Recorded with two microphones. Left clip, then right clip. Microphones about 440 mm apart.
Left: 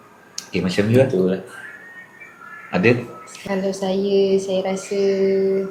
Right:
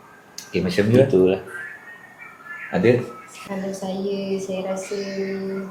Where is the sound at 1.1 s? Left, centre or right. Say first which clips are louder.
Right 3 dB; right.